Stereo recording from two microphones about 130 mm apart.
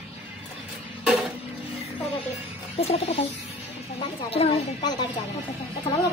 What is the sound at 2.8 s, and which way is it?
Music, 50° left (ahead or behind).